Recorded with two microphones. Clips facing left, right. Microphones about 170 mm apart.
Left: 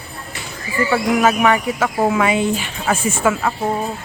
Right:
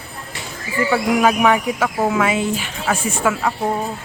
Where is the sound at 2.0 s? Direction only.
10° left (ahead or behind).